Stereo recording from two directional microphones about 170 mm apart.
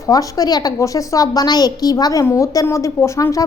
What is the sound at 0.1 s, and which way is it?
A woman's voice, 20° left (ahead or behind).